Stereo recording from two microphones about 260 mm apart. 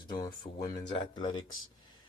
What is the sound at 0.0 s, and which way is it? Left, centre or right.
Speech, centre.